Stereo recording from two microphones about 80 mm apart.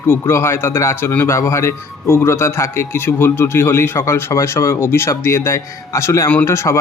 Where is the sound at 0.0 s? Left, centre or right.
Left.